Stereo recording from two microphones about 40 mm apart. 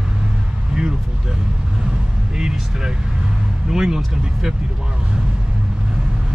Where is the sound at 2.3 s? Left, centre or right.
Centre.